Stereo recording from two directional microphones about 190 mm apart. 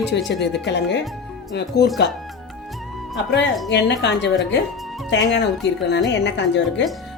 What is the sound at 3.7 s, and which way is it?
Speech, 65° left (ahead or behind).